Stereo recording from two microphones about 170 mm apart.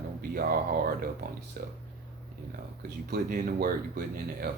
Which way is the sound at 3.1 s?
55° right (ahead or behind).